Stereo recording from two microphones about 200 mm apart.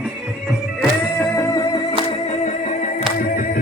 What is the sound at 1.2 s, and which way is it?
Music, 15° left (ahead or behind).